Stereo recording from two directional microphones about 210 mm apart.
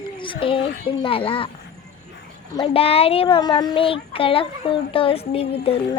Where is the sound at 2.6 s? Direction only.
25° left (ahead or behind).